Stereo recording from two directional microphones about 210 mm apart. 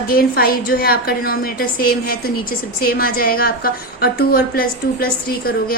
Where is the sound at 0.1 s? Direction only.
45° left (ahead or behind).